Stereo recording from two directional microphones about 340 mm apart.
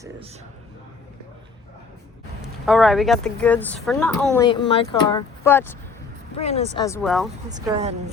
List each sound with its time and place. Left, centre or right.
2.4 s speech: centre
4.4 s speech: centre
6.3 s speech: centre
7.5 s speech: centre